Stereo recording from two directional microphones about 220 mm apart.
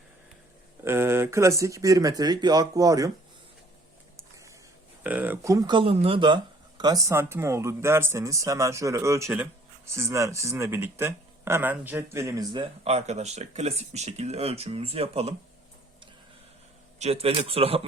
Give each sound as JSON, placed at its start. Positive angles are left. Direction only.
{"t": 0.9, "sound": "speech", "side_deg": -10}
{"t": 5.0, "sound": "speech", "side_deg": -5}
{"t": 17.0, "sound": "speech", "side_deg": -25}